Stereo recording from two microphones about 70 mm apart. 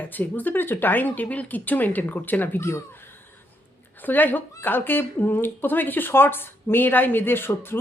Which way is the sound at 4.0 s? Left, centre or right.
Left.